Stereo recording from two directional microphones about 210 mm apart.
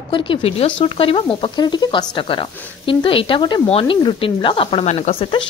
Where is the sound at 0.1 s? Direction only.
25° left (ahead or behind).